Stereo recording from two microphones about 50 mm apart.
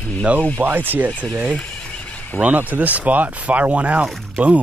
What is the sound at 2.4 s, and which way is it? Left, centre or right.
Speech, right.